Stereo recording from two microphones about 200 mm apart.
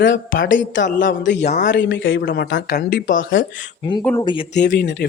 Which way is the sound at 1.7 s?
60° left (ahead or behind).